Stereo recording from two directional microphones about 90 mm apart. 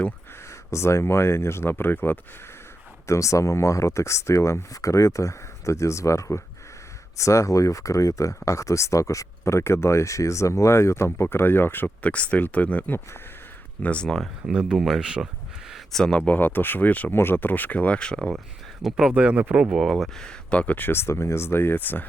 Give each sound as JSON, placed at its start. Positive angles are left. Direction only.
{"t": 0.7, "sound": "speech", "side_deg": 30}
{"t": 3.1, "sound": "speech", "side_deg": 35}
{"t": 14.4, "sound": "speech", "side_deg": -10}
{"t": 18.8, "sound": "speech", "side_deg": -5}
{"t": 19.8, "sound": "speech", "side_deg": 5}